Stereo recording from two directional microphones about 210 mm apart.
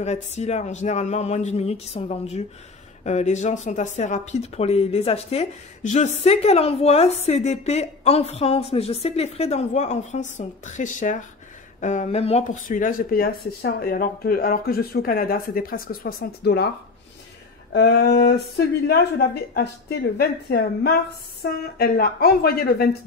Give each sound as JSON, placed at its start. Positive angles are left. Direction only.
{"t": 0.0, "sound": "a woman's voice", "side_deg": 30}
{"t": 17.7, "sound": "speech", "side_deg": 50}